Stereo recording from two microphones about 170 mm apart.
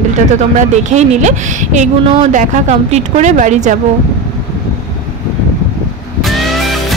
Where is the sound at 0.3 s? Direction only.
45° right (ahead or behind).